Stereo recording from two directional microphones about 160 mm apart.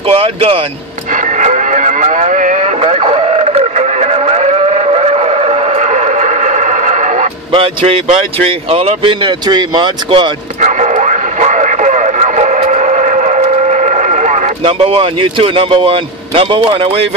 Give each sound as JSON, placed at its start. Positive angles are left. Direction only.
{"t": 0.1, "sound": "speech", "side_deg": -35}
{"t": 1.1, "sound": "a sound", "side_deg": -50}
{"t": 2.8, "sound": "radio", "side_deg": -35}
{"t": 7.5, "sound": "speech", "side_deg": -35}
{"t": 10.6, "sound": "radio", "side_deg": -50}
{"t": 14.6, "sound": "speech", "side_deg": -35}